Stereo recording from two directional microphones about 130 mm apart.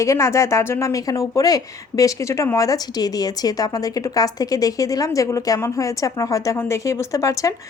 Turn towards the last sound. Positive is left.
turn(degrees=25)  # may be behind; listen again after turning